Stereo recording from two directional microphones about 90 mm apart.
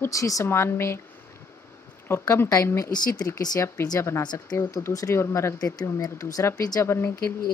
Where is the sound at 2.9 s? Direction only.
45° left (ahead or behind).